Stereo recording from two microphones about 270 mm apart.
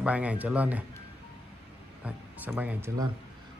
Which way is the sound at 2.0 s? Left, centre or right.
Centre.